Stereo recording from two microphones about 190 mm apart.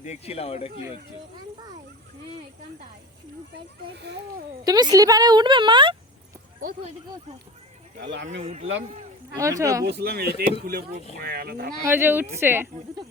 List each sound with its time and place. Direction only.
0.0 s speech: 35° left (ahead or behind)
3.9 s speech: 65° right (ahead or behind)
4.6 s a woman's voice: 20° right (ahead or behind)
6.6 s speech: 45° right (ahead or behind)
8.1 s speech: 75° right (ahead or behind)
9.3 s speech: 15° right (ahead or behind)
9.8 s speech: 55° right (ahead or behind)
11.8 s speech: 10° right (ahead or behind)